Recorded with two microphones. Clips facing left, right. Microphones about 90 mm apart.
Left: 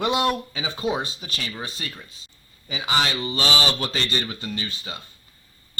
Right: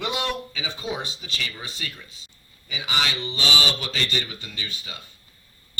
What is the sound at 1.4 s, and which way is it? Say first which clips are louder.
Speech: left 2 dB; 35° left (ahead or behind).